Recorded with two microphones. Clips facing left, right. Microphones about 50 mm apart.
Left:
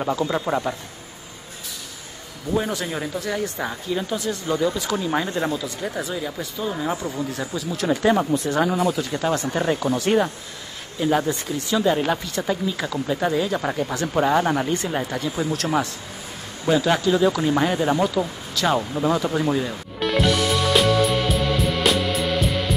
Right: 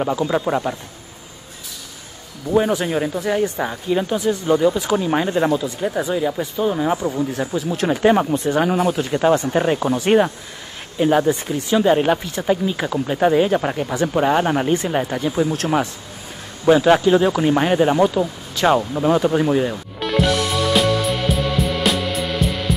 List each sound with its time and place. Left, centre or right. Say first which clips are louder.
0.0 s speech: right 3 dB; centre
2.5 s speech: right 7 dB; right
7.5 s speech: right 2 dB; right
8.6 s speech: right 3 dB; right
9.1 s speech: right 6 dB; right
11.1 s speech: right 5 dB; centre
11.7 s speech: right 5 dB; right
13.6 s speech: right 3 dB; centre
15.5 s speech: right 3 dB; right
19.7 s music: right 1 dB; centre